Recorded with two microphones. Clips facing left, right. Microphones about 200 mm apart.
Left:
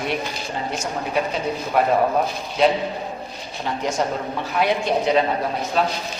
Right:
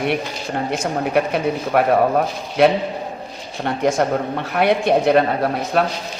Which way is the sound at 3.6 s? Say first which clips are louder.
Right 5 dB; 60° right (ahead or behind).